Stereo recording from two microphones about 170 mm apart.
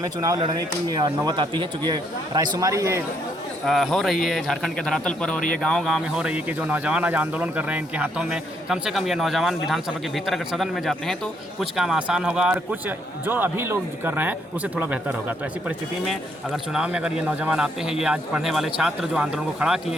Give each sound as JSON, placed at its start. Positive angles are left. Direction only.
{"t": 0.0, "sound": "speech", "side_deg": -20}
{"t": 3.7, "sound": "a man's voice", "side_deg": 0}
{"t": 16.7, "sound": "speech", "side_deg": -5}